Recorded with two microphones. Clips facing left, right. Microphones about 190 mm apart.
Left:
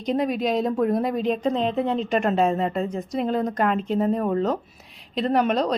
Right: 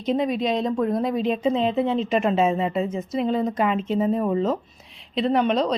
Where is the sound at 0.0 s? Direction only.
Centre (ahead or behind).